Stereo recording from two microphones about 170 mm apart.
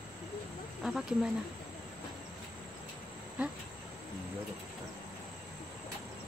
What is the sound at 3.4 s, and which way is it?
Speech, 5° right (ahead or behind).